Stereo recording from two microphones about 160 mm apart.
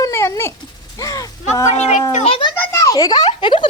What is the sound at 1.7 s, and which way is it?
A child's voice, 45° left (ahead or behind).